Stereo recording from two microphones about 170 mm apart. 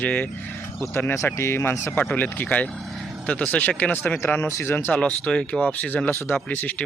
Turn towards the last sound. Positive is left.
turn(degrees=10)  # may be behind; listen again after turning